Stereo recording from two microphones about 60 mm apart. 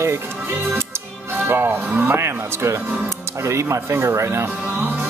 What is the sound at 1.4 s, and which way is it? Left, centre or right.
Speech, right.